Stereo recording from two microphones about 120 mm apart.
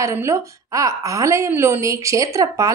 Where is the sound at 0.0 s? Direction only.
25° right (ahead or behind).